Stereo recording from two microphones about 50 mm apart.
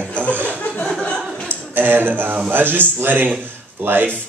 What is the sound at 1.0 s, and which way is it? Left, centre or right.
Chuckle, left.